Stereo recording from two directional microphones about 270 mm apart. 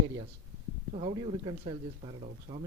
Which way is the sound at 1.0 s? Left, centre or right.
Right.